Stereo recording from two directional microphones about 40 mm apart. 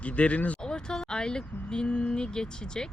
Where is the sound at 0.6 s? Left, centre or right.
Centre.